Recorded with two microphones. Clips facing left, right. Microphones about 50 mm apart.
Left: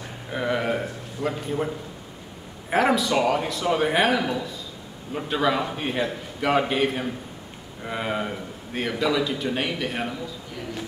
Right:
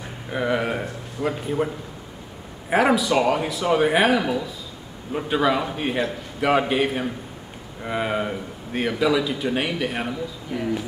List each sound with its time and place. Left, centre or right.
0.3 s a man's voice: centre
2.7 s a man's voice: centre
10.5 s a man's voice: centre